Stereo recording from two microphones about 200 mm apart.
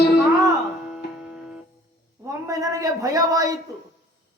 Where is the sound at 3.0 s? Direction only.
15° right (ahead or behind).